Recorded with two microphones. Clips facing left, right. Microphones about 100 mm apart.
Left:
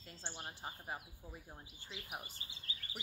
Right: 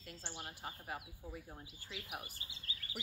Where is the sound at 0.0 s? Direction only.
30° left (ahead or behind).